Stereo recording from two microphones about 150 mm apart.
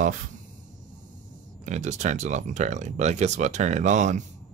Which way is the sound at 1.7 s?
50° right (ahead or behind).